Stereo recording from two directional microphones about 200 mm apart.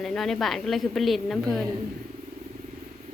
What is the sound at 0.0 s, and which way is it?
A woman's voice, centre (ahead or behind).